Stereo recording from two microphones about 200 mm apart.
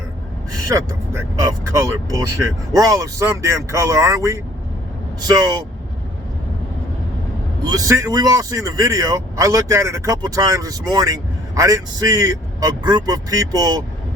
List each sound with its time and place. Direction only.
0.7 s speech: 15° right (ahead or behind)
7.6 s speech: 20° right (ahead or behind)